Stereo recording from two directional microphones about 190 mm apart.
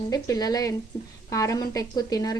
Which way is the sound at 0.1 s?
20° left (ahead or behind).